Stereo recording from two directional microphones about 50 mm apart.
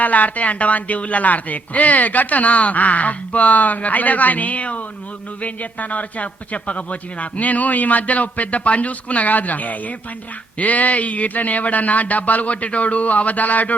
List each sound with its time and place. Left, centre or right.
0.0 s a man's voice: left